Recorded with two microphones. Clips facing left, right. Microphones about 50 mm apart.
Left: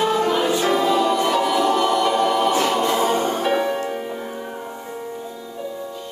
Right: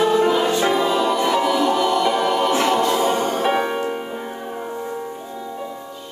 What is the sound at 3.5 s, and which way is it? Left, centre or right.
Music, right.